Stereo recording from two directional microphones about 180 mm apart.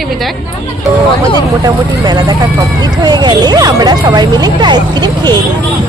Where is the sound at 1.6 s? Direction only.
20° right (ahead or behind).